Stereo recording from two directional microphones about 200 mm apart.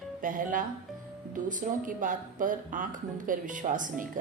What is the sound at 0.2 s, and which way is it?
Speech, 40° right (ahead or behind).